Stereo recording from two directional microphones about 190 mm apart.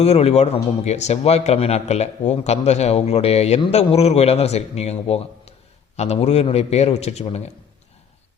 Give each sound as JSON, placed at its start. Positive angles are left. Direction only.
{"t": 0.0, "sound": "a man's voice", "side_deg": 35}